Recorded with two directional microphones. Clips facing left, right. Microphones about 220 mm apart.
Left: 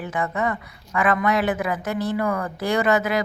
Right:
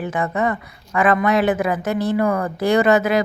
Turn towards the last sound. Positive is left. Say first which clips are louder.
# right 5 dB
turn(degrees=-25)  # may be behind; listen again after turning